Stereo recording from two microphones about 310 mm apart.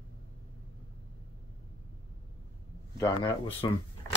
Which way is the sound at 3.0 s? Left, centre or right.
Centre.